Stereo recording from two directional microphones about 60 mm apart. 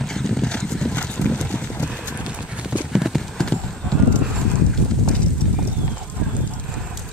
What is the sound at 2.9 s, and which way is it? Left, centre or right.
Clip-clop, centre.